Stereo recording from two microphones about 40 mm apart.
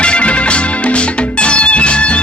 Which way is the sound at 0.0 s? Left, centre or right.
Left.